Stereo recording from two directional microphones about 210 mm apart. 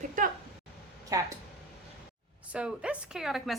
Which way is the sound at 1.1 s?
15° right (ahead or behind).